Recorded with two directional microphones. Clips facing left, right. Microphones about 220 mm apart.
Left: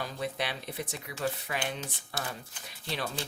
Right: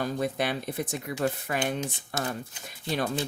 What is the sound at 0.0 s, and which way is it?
Speech, 50° right (ahead or behind).